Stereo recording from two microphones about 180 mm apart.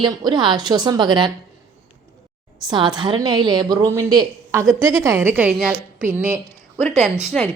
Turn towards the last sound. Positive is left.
turn(degrees=0)  # may be behind; listen again after turning